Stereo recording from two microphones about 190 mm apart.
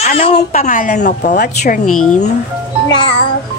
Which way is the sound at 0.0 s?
30° left (ahead or behind).